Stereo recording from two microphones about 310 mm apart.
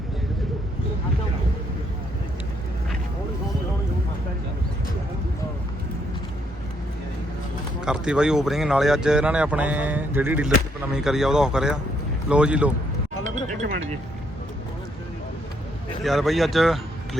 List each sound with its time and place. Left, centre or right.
7.8 s speech: centre
13.6 s a sound: right
16.0 s speech: centre